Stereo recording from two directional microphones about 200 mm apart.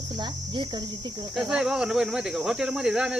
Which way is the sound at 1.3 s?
Centre (ahead or behind).